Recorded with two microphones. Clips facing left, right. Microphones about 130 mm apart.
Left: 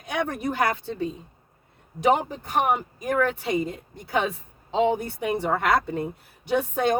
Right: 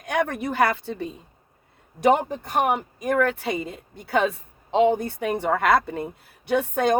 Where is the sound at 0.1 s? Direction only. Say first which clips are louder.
Right 2 dB; 60° right (ahead or behind).